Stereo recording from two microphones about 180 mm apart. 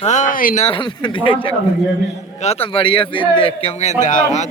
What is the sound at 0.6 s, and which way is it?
Speech, 25° left (ahead or behind).